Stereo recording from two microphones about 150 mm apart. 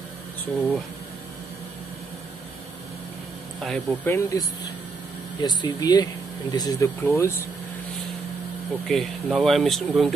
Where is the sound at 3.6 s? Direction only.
Centre (ahead or behind).